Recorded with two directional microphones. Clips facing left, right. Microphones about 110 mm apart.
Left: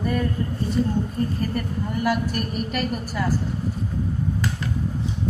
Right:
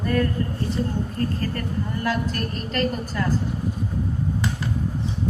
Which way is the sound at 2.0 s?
10° left (ahead or behind).